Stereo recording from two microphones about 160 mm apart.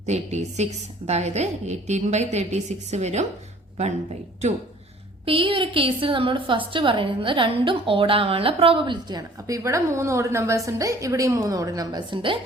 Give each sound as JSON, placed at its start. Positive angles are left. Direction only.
{"t": 0.0, "sound": "a woman's voice", "side_deg": -45}
{"t": 5.2, "sound": "a woman's voice", "side_deg": -35}